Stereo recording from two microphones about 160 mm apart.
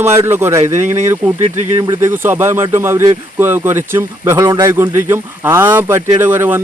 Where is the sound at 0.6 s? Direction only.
50° right (ahead or behind).